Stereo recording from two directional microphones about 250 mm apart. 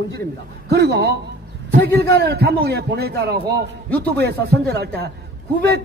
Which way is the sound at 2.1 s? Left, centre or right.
Right.